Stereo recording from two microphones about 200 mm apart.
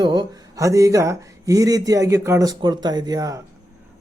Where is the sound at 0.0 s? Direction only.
20° right (ahead or behind).